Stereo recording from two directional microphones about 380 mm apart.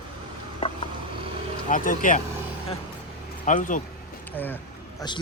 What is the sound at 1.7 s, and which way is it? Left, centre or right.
Speech, left.